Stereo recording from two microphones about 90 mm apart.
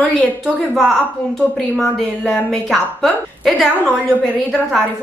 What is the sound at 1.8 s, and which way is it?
A woman's voice, 5° left (ahead or behind).